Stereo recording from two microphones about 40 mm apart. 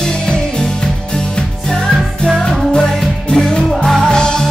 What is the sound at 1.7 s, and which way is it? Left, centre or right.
Music, centre.